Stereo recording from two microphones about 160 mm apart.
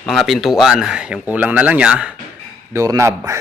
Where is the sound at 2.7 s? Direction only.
20° right (ahead or behind).